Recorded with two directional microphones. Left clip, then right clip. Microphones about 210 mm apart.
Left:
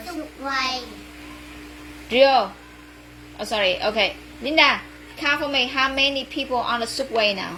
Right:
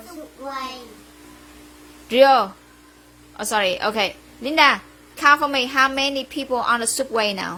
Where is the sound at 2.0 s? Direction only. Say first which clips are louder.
Right 2 dB; 40° right (ahead or behind).